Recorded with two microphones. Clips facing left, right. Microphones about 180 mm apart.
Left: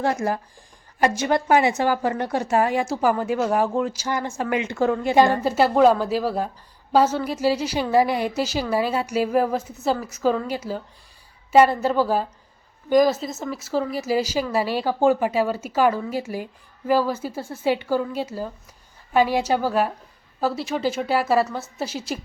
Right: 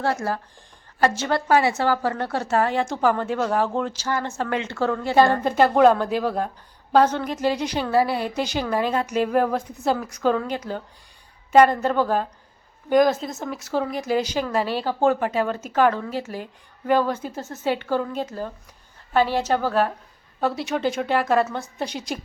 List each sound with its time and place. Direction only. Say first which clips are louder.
0.0 s a woman's voice: left 2 dB; 15° left (ahead or behind)